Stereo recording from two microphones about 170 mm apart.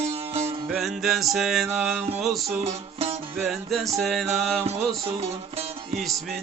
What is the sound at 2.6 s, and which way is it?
Music, 40° right (ahead or behind).